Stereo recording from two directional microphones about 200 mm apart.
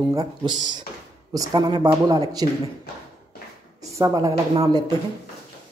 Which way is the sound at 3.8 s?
15° right (ahead or behind).